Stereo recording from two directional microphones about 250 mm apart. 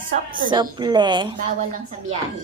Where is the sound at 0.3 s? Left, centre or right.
Right.